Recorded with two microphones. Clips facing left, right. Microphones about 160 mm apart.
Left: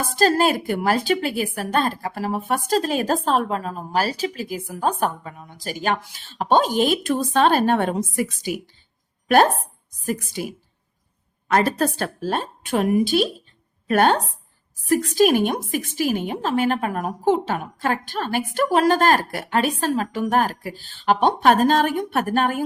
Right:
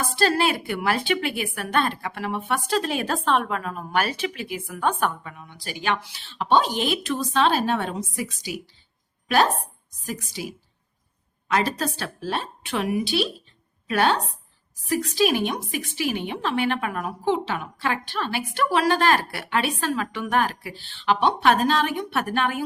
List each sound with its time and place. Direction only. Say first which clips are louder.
0.2 s a woman's voice: left 4 dB; 40° left (ahead or behind)